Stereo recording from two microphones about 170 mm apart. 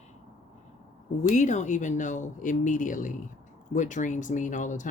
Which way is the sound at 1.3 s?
45° left (ahead or behind).